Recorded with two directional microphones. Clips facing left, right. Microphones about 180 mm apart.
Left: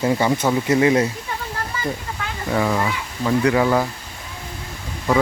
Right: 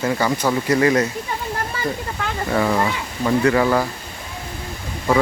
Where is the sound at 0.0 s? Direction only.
20° left (ahead or behind).